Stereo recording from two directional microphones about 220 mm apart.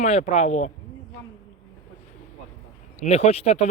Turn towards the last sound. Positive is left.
turn(degrees=30)  # may be behind; listen again after turning